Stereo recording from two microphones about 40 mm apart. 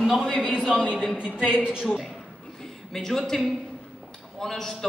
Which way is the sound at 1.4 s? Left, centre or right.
Right.